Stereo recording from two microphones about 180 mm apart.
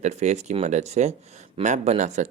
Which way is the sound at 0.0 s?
40° right (ahead or behind).